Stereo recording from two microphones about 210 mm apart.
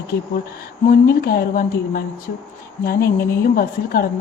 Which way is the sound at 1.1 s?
45° left (ahead or behind).